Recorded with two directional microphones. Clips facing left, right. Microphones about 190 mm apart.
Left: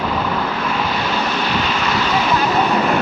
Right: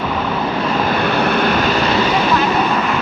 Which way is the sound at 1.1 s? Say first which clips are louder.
Right 5 dB; 60° right (ahead or behind).